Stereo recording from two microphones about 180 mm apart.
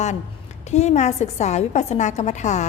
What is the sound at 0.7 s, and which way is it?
A woman's voice, 40° left (ahead or behind).